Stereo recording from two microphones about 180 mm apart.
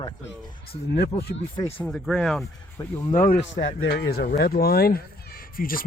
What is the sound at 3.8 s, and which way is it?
Speech, 65° left (ahead or behind).